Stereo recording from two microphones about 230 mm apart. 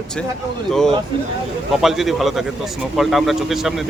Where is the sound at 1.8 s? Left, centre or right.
Centre.